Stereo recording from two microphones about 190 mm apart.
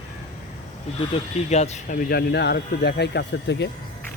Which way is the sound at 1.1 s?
35° left (ahead or behind).